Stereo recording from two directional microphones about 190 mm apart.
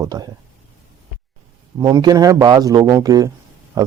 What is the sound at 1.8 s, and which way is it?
Speech, 20° right (ahead or behind).